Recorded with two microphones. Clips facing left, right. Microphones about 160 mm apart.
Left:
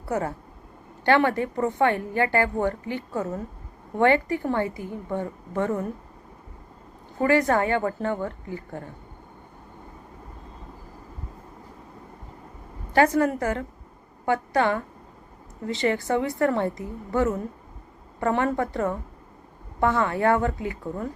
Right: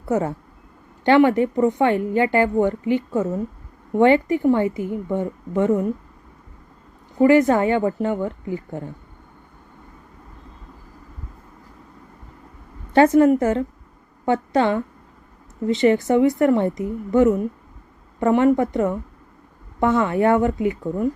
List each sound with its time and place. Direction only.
0.0 s a woman's voice: 20° right (ahead or behind)
7.2 s a woman's voice: 20° right (ahead or behind)
12.9 s a woman's voice: 25° right (ahead or behind)